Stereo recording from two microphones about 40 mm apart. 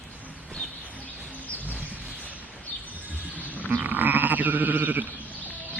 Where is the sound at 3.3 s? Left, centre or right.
Right.